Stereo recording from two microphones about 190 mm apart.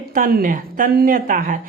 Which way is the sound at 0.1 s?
50° right (ahead or behind).